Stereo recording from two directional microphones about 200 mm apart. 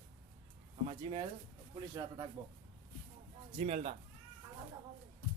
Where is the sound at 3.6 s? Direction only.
30° right (ahead or behind).